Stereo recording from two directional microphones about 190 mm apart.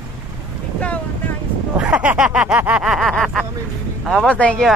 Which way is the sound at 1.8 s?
5° right (ahead or behind).